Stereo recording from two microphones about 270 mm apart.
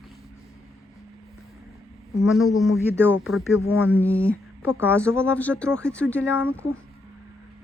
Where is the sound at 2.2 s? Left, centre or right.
Centre.